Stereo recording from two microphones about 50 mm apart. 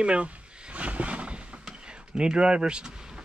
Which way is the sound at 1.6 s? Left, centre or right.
Centre.